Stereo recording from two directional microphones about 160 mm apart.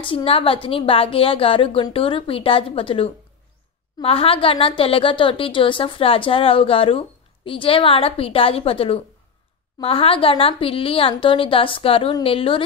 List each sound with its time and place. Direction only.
0.0 s a woman's voice: 35° left (ahead or behind)